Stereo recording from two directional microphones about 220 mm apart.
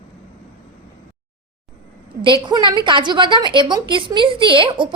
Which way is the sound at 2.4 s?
20° right (ahead or behind).